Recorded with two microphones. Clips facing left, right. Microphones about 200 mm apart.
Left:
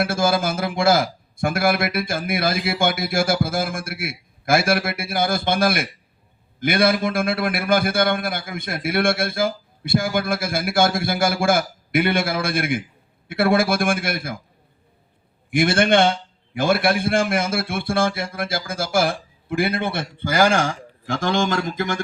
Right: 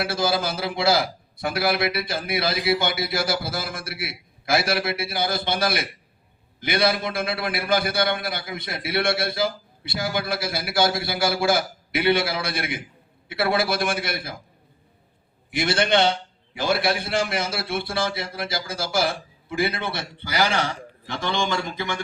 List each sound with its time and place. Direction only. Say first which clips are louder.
0.0 s a man's voice: left 4 dB; 50° left (ahead or behind)
15.4 s a man's voice: left 5 dB; 50° left (ahead or behind)